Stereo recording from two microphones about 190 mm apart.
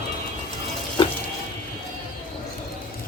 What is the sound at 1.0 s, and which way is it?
Music, 25° left (ahead or behind).